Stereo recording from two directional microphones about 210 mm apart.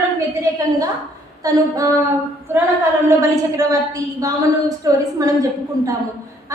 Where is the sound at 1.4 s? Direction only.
15° right (ahead or behind).